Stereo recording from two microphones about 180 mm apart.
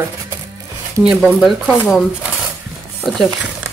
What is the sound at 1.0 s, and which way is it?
Speech, centre (ahead or behind).